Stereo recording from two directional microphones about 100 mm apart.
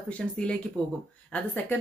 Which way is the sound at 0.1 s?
10° left (ahead or behind).